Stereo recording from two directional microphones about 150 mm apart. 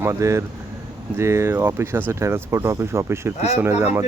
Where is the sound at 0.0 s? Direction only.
20° right (ahead or behind).